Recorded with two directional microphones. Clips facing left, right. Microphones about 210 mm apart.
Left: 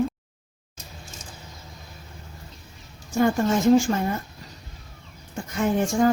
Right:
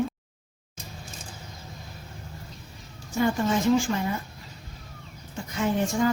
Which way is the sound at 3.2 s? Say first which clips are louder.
Left 3 dB; 45° left (ahead or behind).